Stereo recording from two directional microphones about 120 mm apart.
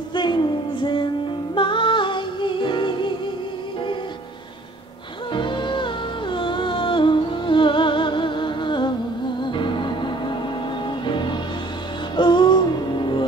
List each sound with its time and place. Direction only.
0.1 s child singing: 40° left (ahead or behind)
1.5 s music: 45° left (ahead or behind)
5.3 s music: 40° left (ahead or behind)